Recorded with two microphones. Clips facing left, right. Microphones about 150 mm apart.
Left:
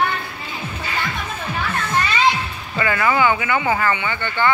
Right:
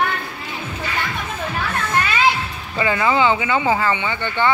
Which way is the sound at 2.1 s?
10° right (ahead or behind).